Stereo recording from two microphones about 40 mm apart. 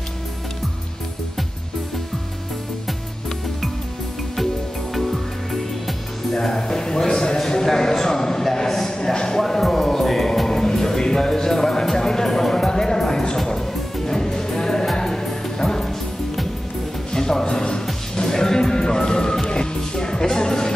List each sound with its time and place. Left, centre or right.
6.3 s a sound: centre
9.4 s music: centre
17.1 s music: centre